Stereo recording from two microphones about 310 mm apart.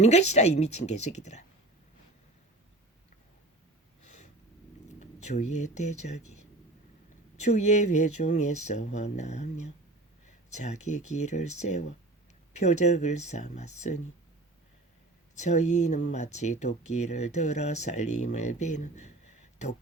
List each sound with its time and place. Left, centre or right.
0.0 s speech: left
4.0 s a sound: left
4.9 s speech: left
15.4 s speech: left